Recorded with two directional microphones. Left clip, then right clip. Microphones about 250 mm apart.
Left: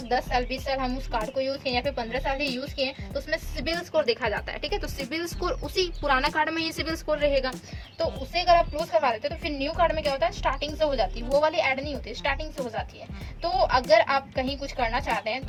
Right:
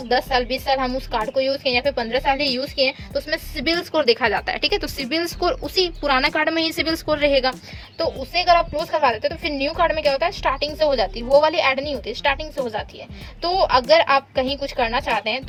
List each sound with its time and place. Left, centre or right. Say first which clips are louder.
0.1 s a woman's voice: right 6 dB; right